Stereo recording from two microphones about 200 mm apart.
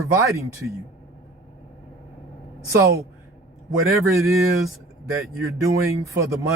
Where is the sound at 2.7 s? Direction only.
15° right (ahead or behind).